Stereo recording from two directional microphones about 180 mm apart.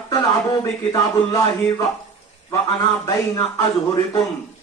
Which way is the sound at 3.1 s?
20° left (ahead or behind).